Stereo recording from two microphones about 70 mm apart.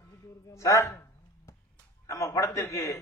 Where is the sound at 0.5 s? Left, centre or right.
Left.